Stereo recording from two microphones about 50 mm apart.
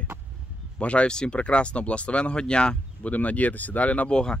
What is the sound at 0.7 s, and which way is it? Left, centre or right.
Speech, left.